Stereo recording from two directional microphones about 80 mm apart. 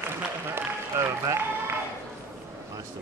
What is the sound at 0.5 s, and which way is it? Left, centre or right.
Run, right.